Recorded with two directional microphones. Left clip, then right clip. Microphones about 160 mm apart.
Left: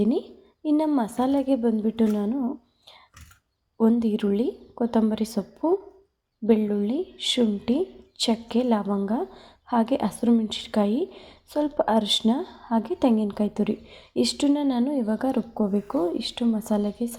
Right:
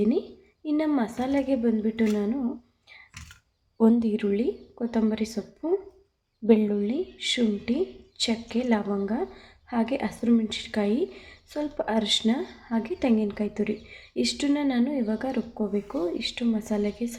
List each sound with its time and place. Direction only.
0.0 s a sound: 30° left (ahead or behind)
0.9 s a woman's voice: 30° left (ahead or behind)
3.8 s a woman's voice: centre (ahead or behind)
4.1 s a woman's voice: 30° left (ahead or behind)
6.4 s a woman's voice: centre (ahead or behind)
6.8 s a woman's voice: 30° left (ahead or behind)